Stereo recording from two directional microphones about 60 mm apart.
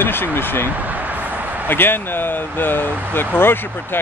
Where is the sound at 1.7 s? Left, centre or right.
Left.